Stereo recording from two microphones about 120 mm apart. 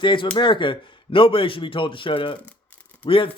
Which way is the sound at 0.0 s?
45° left (ahead or behind).